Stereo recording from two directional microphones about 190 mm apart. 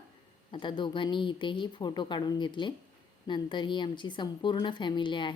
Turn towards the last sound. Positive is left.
turn(degrees=25)  # may be behind; listen again after turning